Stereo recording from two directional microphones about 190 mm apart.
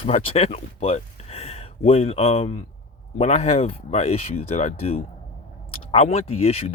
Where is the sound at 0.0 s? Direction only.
30° left (ahead or behind).